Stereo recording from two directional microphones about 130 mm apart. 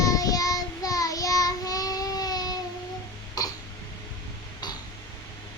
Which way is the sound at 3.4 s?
30° left (ahead or behind).